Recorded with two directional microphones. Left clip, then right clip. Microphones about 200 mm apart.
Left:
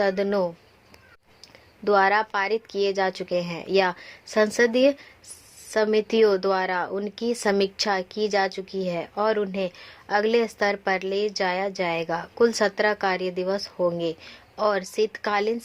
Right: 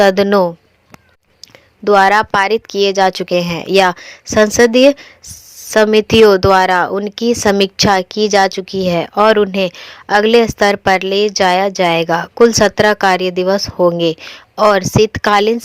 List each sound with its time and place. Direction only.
0.0 s a woman's voice: 40° right (ahead or behind)
1.8 s a woman's voice: 30° right (ahead or behind)